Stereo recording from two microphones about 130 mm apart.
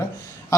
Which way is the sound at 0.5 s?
25° left (ahead or behind).